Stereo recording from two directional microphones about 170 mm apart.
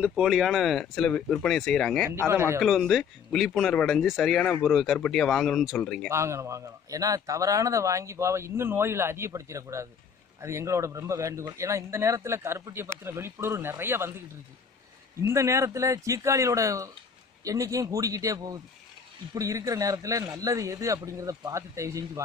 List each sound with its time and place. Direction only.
0.0 s speech: 5° right (ahead or behind)
2.2 s speech: 15° right (ahead or behind)
2.6 s speech: centre (ahead or behind)
6.0 s speech: 15° right (ahead or behind)
15.2 s a man's voice: 15° right (ahead or behind)